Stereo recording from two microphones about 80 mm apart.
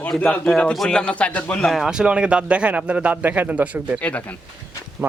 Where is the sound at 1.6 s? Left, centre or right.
Centre.